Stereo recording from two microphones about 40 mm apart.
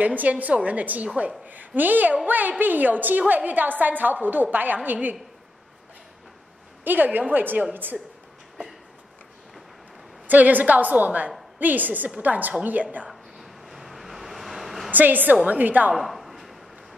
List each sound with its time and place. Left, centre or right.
0.0 s a woman's voice: right
1.0 s a woman's voice: right
1.5 s a woman's voice: right
6.8 s a woman's voice: right
7.7 s a woman's voice: right
10.2 s a woman's voice: right
13.1 s a sound: centre
14.9 s a woman's voice: right
15.9 s a sound: centre